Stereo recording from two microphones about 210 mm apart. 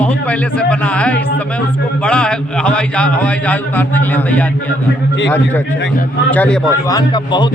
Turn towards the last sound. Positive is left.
turn(degrees=20)  # may be behind; listen again after turning